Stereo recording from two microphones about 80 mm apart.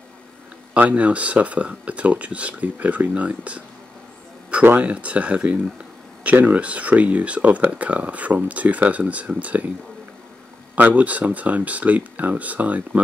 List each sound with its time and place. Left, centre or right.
0.7 s speech: centre
4.6 s speech: centre
10.8 s speech: right